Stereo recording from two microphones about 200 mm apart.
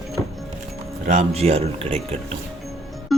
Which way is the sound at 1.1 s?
35° right (ahead or behind).